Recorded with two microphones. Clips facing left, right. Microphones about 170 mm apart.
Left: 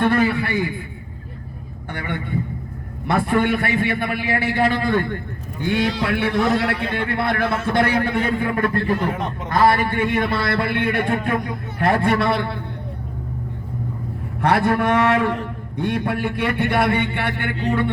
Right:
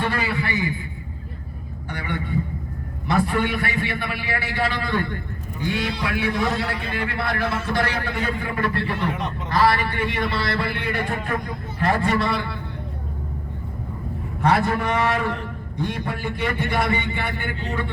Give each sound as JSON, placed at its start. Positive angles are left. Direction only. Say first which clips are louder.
{"t": 0.0, "sound": "a man's voice", "louder": "left 7 dB", "side_deg": 55}
{"t": 1.9, "sound": "a man's voice", "louder": "left 1 dB", "side_deg": 55}
{"t": 14.4, "sound": "a man's voice", "louder": "left 3 dB", "side_deg": 60}